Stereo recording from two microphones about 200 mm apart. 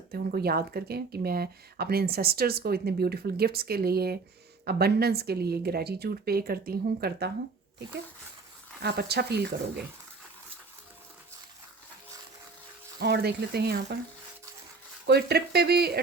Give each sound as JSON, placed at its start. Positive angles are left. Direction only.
{"t": 0.1, "sound": "speech", "side_deg": -50}
{"t": 8.8, "sound": "speech", "side_deg": -55}
{"t": 13.0, "sound": "speech", "side_deg": -55}
{"t": 15.0, "sound": "speech", "side_deg": -55}